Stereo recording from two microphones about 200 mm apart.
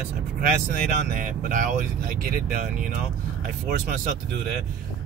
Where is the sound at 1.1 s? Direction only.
40° right (ahead or behind).